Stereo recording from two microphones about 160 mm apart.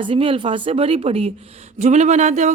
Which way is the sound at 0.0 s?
35° right (ahead or behind).